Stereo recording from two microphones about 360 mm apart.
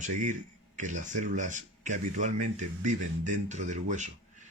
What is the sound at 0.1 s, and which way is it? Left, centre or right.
Speech, right.